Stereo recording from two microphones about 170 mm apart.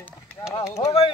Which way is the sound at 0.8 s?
30° left (ahead or behind).